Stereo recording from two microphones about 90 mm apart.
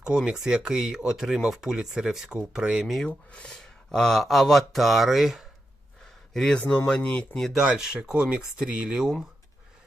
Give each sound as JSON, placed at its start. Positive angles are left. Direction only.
{"t": 0.0, "sound": "speech", "side_deg": -10}
{"t": 3.1, "sound": "speech", "side_deg": 10}
{"t": 6.3, "sound": "speech", "side_deg": 10}
{"t": 7.3, "sound": "speech", "side_deg": 0}